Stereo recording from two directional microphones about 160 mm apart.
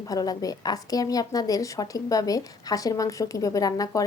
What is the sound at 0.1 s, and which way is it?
Speech, 25° left (ahead or behind).